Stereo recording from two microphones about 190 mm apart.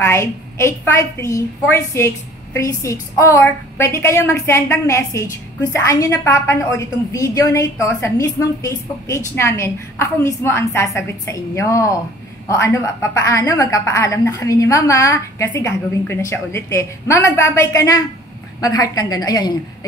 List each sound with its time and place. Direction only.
0.0 s a woman's voice: 15° left (ahead or behind)